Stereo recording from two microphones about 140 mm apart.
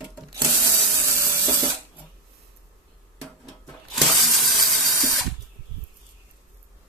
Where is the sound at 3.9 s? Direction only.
Centre (ahead or behind).